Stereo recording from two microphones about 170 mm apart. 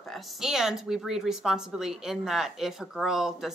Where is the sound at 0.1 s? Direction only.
5° right (ahead or behind).